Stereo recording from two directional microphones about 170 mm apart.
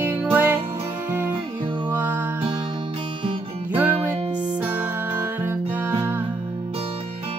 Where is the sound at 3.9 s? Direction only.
35° right (ahead or behind).